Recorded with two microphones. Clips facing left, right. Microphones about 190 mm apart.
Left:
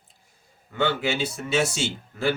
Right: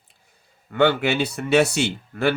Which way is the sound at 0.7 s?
65° right (ahead or behind).